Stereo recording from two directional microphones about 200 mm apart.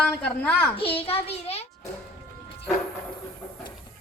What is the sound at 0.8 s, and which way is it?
Speech, 30° left (ahead or behind).